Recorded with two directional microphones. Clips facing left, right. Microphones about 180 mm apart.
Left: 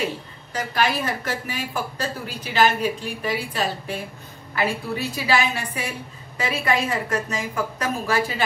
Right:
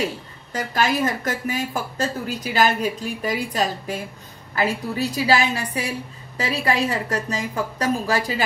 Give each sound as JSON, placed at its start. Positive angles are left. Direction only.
{"t": 0.0, "sound": "a woman's voice", "side_deg": -45}